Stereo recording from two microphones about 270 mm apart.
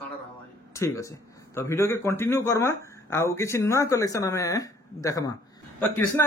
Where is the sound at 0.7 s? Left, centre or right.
Centre.